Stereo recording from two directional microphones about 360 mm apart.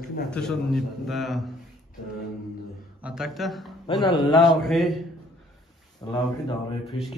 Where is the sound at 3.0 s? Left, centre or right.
Centre.